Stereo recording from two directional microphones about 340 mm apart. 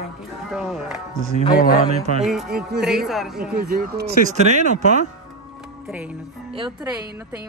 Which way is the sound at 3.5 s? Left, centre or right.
Right.